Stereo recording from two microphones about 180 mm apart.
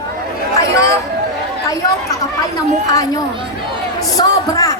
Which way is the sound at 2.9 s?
20° left (ahead or behind).